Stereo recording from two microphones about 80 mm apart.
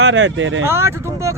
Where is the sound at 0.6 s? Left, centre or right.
Right.